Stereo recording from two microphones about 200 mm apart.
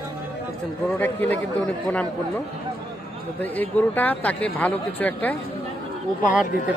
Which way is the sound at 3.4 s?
10° left (ahead or behind).